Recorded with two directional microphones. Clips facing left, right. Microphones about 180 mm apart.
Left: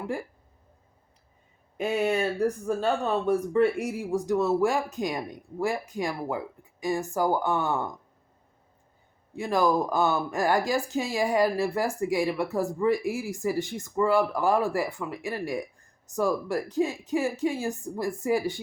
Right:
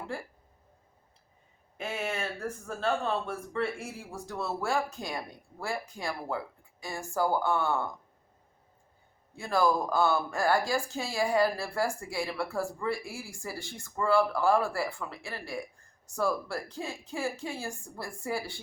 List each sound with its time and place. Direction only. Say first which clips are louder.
1.8 s speech: left 9 dB; 15° left (ahead or behind)
9.3 s speech: left 3 dB; 15° left (ahead or behind)